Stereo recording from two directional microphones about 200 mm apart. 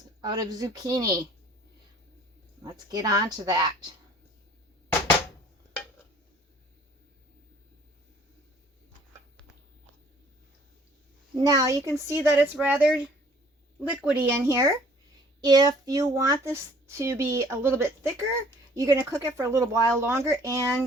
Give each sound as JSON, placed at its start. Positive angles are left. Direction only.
{"t": 0.2, "sound": "a woman's voice", "side_deg": -20}
{"t": 2.6, "sound": "a woman's voice", "side_deg": -20}
{"t": 11.3, "sound": "a child's voice", "side_deg": -20}